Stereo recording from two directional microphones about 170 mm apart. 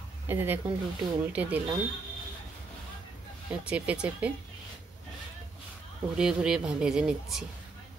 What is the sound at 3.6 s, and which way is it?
Speech, 5° right (ahead or behind).